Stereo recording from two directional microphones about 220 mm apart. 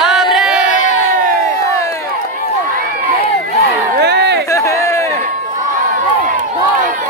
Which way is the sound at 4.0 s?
50° right (ahead or behind).